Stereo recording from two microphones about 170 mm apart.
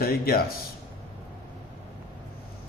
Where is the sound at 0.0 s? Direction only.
60° left (ahead or behind).